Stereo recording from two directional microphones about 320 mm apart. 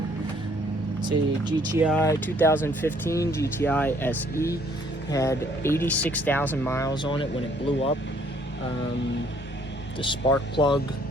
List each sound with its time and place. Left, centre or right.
1.0 s speech: centre
1.9 s speech: centre
10.0 s speech: centre